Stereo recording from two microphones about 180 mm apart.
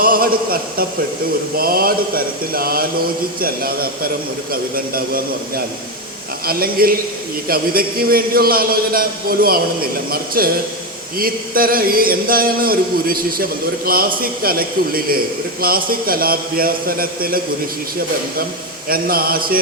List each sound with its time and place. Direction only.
0.0 s a man's voice: 55° right (ahead or behind)
6.4 s a man's voice: 55° right (ahead or behind)
11.2 s a sound: 55° right (ahead or behind)
14.2 s a man's voice: 55° right (ahead or behind)
18.9 s a man's voice: 55° right (ahead or behind)